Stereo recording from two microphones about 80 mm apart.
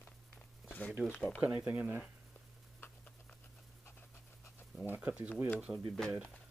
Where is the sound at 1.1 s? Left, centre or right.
Left.